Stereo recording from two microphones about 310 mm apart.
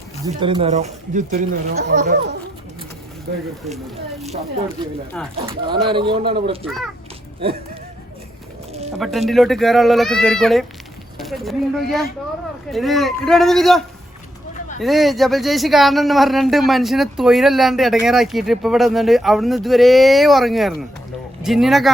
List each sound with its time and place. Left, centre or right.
0.3 s speech: centre
5.5 s speech: centre
6.7 s speech: centre
9.0 s speech: centre